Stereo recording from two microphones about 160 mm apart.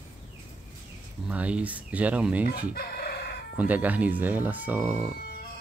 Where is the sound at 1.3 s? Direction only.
10° right (ahead or behind).